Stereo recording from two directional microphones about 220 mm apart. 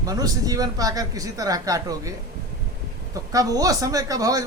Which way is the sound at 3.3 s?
15° right (ahead or behind).